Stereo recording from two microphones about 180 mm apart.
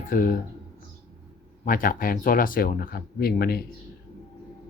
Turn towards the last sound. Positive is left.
turn(degrees=60)  # may be behind; listen again after turning